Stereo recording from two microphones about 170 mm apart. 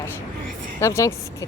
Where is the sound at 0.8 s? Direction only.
15° left (ahead or behind).